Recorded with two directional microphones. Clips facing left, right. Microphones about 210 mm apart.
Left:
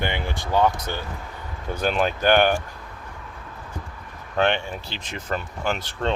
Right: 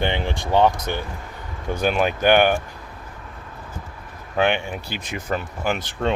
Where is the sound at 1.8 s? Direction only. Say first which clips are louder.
Right 2 dB; 10° right (ahead or behind).